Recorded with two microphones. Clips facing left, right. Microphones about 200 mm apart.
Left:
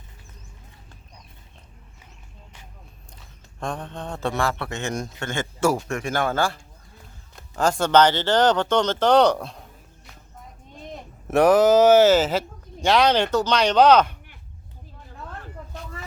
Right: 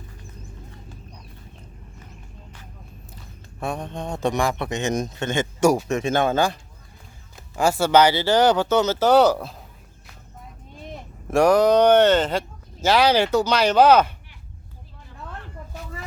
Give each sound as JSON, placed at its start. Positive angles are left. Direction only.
{"t": 3.6, "sound": "speech", "side_deg": -10}
{"t": 11.3, "sound": "speech", "side_deg": 0}